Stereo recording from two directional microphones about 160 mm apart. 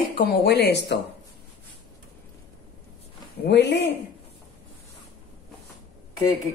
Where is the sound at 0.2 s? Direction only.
80° left.